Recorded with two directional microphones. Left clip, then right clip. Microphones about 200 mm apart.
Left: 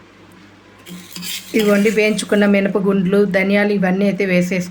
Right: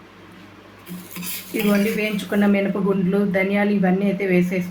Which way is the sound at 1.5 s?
55° left (ahead or behind).